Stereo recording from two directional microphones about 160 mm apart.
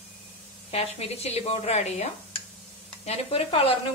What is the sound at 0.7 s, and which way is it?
Speech, 40° left (ahead or behind).